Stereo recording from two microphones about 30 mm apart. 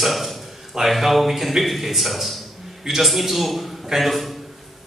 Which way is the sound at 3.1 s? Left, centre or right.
Centre.